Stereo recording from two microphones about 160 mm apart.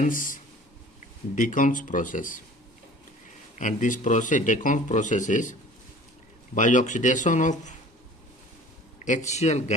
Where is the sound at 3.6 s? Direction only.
55° left (ahead or behind).